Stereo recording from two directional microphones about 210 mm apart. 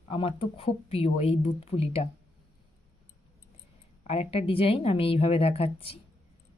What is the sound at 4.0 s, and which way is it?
Speech, 30° left (ahead or behind).